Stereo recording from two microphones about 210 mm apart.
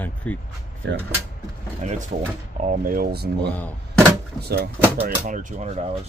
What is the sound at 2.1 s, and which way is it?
Speech, 35° right (ahead or behind).